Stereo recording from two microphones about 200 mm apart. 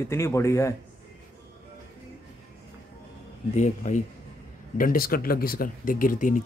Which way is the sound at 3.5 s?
35° left (ahead or behind).